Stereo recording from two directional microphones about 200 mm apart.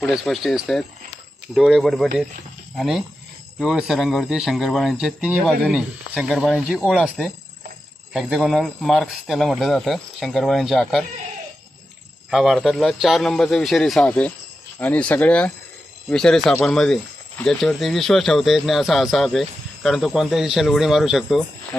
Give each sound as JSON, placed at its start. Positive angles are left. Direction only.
{"t": 0.0, "sound": "speech", "side_deg": 0}
{"t": 12.3, "sound": "speech", "side_deg": 0}